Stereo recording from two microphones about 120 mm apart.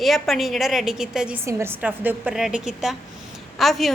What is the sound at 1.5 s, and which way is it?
Speech, 20° right (ahead or behind).